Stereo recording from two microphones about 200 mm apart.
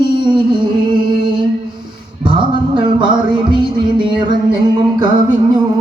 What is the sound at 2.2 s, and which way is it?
Music, 25° right (ahead or behind).